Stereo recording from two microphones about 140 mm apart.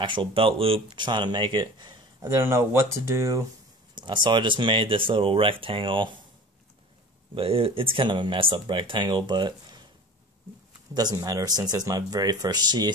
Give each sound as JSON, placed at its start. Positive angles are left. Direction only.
{"t": 0.0, "sound": "speech", "side_deg": -35}
{"t": 3.9, "sound": "speech", "side_deg": -35}
{"t": 7.3, "sound": "speech", "side_deg": -40}
{"t": 11.0, "sound": "speech", "side_deg": -30}